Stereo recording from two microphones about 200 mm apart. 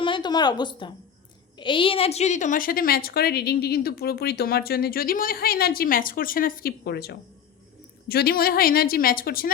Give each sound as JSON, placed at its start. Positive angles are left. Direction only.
{"t": 0.0, "sound": "a woman's voice", "side_deg": 25}